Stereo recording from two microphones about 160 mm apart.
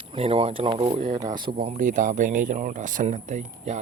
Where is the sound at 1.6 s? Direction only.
55° right (ahead or behind).